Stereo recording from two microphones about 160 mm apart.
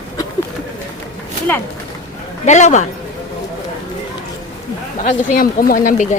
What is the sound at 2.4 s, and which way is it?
Speech, 45° left (ahead or behind).